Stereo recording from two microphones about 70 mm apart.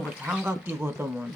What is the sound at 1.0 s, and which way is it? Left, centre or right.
Speech, right.